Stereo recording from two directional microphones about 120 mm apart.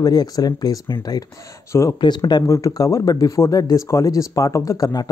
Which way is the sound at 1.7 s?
25° left (ahead or behind).